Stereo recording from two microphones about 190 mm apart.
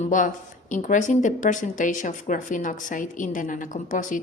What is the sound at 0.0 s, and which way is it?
Speech, 40° left (ahead or behind).